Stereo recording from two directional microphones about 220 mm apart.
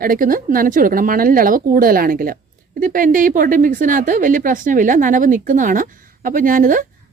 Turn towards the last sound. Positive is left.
turn(degrees=-40)  # may be behind; listen again after turning